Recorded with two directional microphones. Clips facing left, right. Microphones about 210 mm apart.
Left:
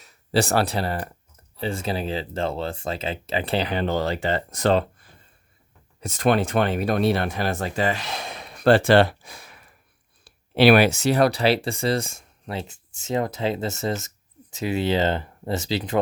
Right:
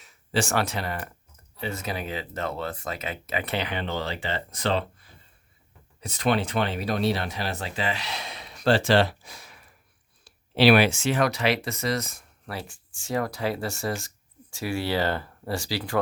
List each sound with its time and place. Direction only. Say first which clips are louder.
0.0 s speech: left 5 dB; 35° left (ahead or behind); by 16.0 s 20° left (ahead or behind)